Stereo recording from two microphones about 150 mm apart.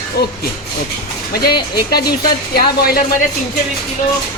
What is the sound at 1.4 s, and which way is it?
Speech, 90° left.